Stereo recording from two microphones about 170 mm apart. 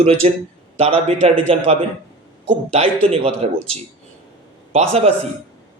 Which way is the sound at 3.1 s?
35° right (ahead or behind).